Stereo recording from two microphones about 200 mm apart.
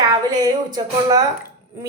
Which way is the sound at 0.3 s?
20° right (ahead or behind).